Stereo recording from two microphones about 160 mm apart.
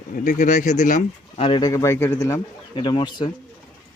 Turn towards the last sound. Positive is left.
turn(degrees=25)  # may be behind; listen again after turning